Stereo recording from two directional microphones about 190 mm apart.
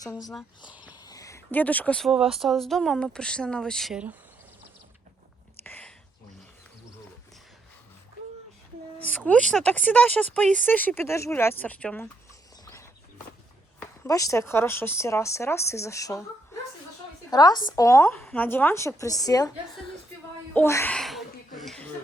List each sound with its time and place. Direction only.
0.9 s speech: 20° left (ahead or behind); by 4.2 s 5° right (ahead or behind)
5.6 s whispering: 10° left (ahead or behind)
9.0 s speech: 10° left (ahead or behind)
14.1 s speech: 15° left (ahead or behind)
17.3 s a woman's voice: 20° left (ahead or behind)
20.9 s speech: centre (ahead or behind)
21.6 s a sound: 5° left (ahead or behind)